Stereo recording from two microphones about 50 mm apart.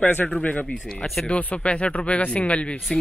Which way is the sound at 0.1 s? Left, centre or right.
Left.